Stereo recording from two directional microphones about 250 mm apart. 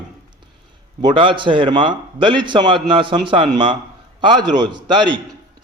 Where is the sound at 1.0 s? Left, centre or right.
Centre.